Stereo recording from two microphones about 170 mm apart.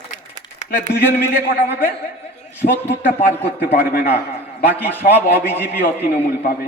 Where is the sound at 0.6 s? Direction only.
45° left (ahead or behind).